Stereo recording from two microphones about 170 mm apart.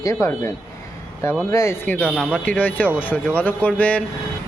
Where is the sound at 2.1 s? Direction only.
5° right (ahead or behind).